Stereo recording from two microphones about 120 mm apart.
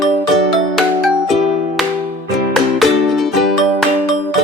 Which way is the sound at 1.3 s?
Centre (ahead or behind).